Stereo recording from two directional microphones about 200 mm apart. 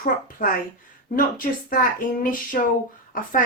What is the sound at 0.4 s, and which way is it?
Speech, 40° left (ahead or behind).